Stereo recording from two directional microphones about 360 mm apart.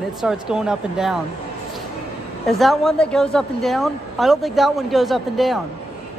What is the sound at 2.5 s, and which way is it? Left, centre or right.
Speech, centre.